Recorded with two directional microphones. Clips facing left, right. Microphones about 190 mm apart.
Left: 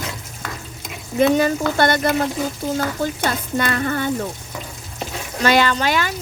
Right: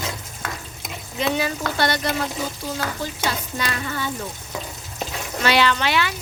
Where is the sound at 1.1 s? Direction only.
50° left (ahead or behind).